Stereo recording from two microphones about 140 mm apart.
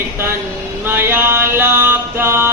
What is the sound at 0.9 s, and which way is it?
Mantra, 15° right (ahead or behind).